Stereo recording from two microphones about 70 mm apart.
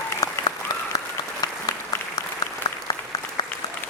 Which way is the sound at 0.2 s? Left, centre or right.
Left.